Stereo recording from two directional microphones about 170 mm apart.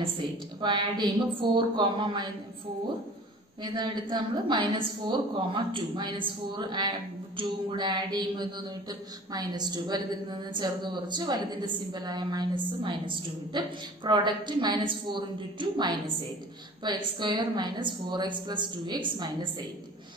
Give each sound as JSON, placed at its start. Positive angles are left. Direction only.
{"t": 0.0, "sound": "a woman's voice", "side_deg": -30}
{"t": 3.6, "sound": "a woman's voice", "side_deg": -30}